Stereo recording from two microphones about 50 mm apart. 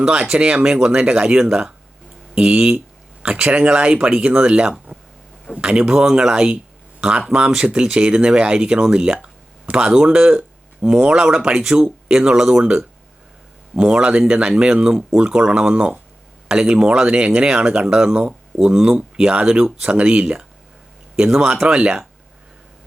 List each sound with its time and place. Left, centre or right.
0.0 s speech: centre